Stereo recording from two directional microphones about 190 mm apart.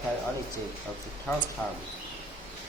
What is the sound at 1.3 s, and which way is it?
Speech, 5° left (ahead or behind).